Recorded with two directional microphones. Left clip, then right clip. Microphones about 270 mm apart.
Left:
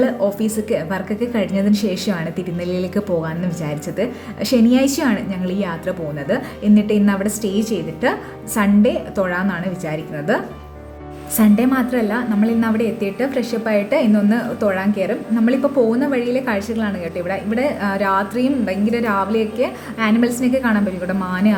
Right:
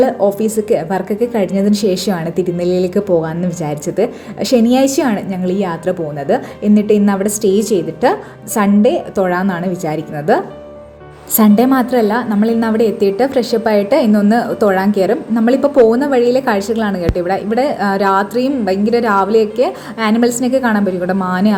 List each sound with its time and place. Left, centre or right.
0.3 s a woman's voice: centre